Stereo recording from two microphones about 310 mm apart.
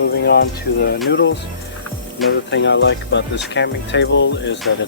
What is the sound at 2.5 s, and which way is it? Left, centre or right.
Speech, left.